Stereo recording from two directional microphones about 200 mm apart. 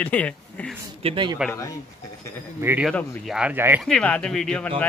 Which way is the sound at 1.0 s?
25° right (ahead or behind).